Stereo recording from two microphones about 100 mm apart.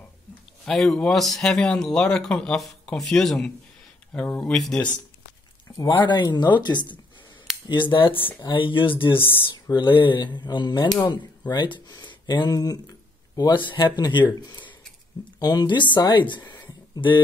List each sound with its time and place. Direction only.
0.7 s speech: 5° left (ahead or behind)
6.0 s speech: 50° left (ahead or behind)
8.1 s speech: 20° left (ahead or behind)
8.4 s speech: 55° left (ahead or behind)